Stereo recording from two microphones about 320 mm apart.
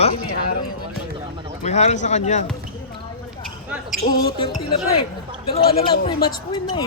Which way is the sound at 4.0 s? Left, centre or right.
Left.